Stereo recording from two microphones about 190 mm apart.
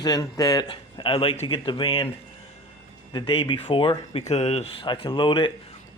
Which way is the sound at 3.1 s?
25° left (ahead or behind).